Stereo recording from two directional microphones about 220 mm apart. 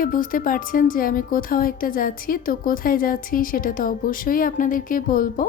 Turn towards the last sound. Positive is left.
turn(degrees=40)  # may be behind; listen again after turning